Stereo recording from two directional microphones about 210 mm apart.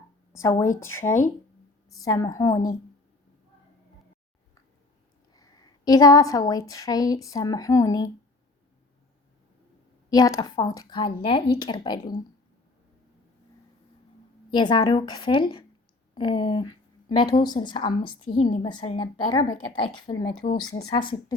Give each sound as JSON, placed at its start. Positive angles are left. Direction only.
{"t": 0.3, "sound": "a woman's voice", "side_deg": 15}
{"t": 5.3, "sound": "a woman's voice", "side_deg": 20}
{"t": 10.1, "sound": "speech", "side_deg": 15}
{"t": 14.5, "sound": "speech", "side_deg": 20}
{"t": 20.4, "sound": "speech", "side_deg": 35}
{"t": 20.9, "sound": "speech", "side_deg": 20}